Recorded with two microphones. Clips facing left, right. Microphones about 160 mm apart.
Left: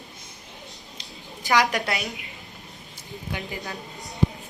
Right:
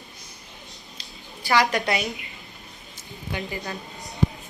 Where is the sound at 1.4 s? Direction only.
15° left (ahead or behind).